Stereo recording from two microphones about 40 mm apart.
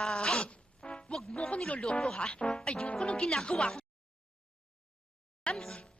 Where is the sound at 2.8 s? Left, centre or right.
Left.